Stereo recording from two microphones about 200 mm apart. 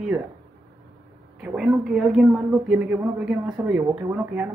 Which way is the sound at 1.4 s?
Centre (ahead or behind).